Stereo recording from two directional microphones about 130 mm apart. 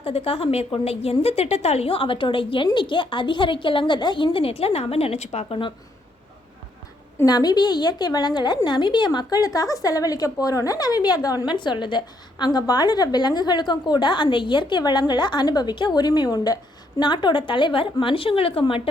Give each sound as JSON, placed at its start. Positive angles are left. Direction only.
{"t": 0.0, "sound": "a woman's voice", "side_deg": 45}
{"t": 7.3, "sound": "a woman's voice", "side_deg": 30}